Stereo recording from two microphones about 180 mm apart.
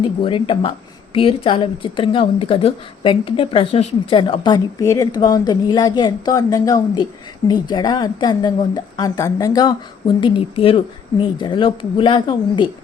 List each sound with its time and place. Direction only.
0.0 s speech: 30° left (ahead or behind)